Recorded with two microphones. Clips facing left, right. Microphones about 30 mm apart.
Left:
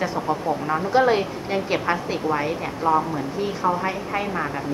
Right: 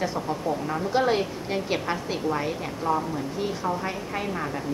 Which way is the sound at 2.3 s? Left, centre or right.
Centre.